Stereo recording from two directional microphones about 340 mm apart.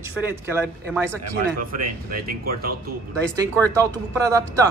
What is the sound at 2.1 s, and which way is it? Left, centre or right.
Speech, right.